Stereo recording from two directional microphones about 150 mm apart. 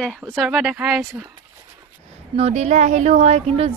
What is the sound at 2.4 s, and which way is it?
Speech, 50° right (ahead or behind).